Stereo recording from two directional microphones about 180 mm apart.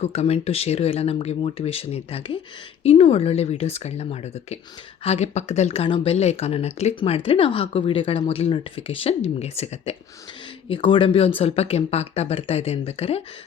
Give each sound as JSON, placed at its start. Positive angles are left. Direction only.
{"t": 0.0, "sound": "speech", "side_deg": 35}